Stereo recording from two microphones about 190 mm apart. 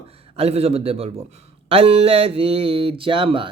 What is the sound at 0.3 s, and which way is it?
Music, 35° right (ahead or behind).